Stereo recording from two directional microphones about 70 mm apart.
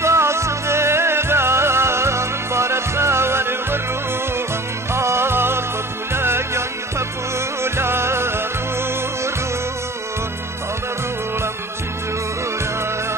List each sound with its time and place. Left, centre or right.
0.0 s music: right
4.9 s music: right